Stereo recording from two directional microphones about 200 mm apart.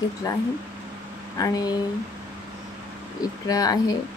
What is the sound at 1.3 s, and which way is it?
Speech, 20° left (ahead or behind).